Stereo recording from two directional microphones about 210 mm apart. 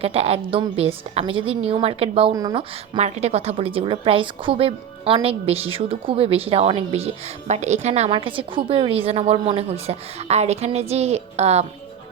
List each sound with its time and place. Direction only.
0.0 s a woman's voice: 30° right (ahead or behind)